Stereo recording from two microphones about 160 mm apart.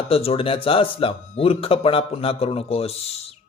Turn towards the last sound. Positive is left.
turn(degrees=40)  # may be behind; listen again after turning